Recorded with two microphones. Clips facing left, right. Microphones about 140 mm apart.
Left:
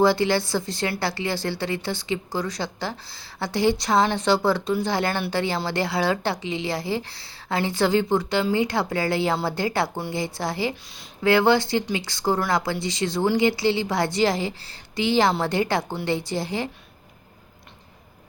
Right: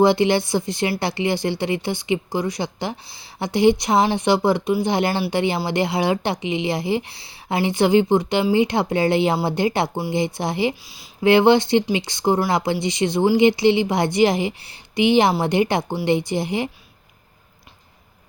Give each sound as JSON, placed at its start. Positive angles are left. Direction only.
{"t": 0.0, "sound": "a woman's voice", "side_deg": -20}